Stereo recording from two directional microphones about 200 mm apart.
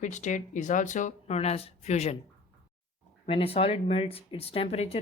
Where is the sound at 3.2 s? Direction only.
30° left (ahead or behind).